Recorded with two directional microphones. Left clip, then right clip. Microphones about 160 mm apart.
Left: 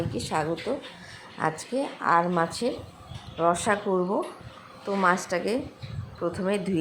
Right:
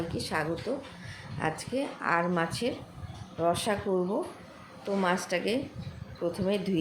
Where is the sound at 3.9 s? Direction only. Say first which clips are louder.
Left 4 dB; 25° left (ahead or behind).